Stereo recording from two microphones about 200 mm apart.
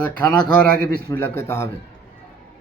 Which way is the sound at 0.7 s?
50° right (ahead or behind).